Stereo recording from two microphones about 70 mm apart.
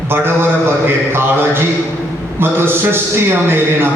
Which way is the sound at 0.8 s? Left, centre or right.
Right.